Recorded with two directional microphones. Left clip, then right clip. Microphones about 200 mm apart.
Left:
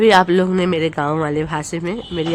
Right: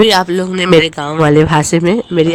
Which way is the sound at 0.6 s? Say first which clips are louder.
Right 8 dB; 50° right (ahead or behind).